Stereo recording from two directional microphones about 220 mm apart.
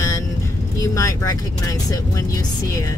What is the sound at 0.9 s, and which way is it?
Speech, 15° left (ahead or behind).